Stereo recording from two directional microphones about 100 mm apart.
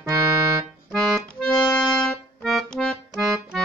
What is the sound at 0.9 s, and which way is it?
Accordion, 5° left (ahead or behind).